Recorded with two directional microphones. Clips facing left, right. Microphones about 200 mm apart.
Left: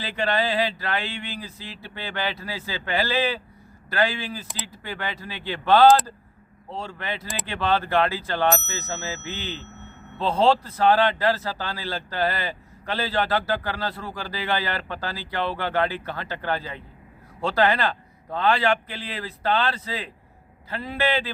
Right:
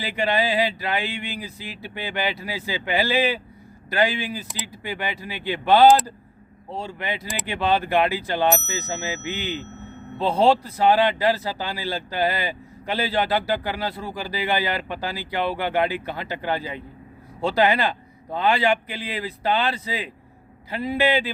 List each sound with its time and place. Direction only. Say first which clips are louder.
0.0 s speech: right 2 dB; 10° right (ahead or behind)